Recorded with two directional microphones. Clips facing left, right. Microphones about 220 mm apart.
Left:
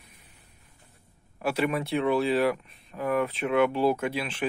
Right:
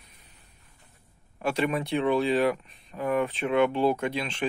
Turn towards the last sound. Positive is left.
turn(degrees=10)  # may be behind; listen again after turning